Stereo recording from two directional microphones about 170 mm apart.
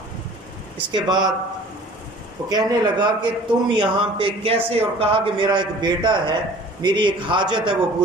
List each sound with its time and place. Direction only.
0.9 s a man's voice: 25° right (ahead or behind)
2.5 s a man's voice: 25° right (ahead or behind)